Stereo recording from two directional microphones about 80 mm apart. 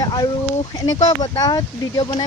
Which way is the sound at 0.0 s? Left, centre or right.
Left.